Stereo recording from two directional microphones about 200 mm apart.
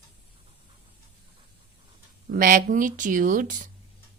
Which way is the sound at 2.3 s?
45° right (ahead or behind).